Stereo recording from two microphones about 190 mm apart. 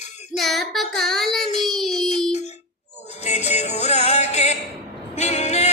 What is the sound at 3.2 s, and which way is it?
Music, 35° left (ahead or behind).